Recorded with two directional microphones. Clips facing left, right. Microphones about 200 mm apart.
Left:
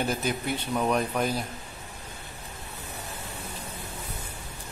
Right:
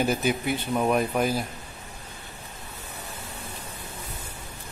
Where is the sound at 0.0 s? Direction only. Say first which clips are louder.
Right 4 dB; 5° right (ahead or behind).